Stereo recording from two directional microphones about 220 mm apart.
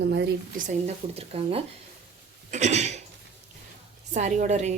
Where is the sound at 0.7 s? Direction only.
30° right (ahead or behind).